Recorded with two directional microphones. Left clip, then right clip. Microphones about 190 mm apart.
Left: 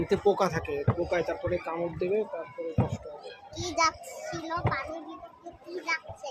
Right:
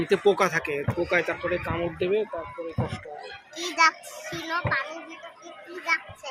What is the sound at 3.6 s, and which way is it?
Speech, 20° left (ahead or behind).